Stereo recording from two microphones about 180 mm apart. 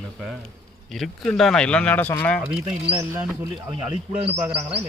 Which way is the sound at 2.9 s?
10° right (ahead or behind).